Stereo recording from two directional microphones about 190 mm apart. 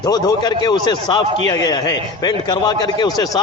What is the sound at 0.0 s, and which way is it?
A man's voice, 20° left (ahead or behind).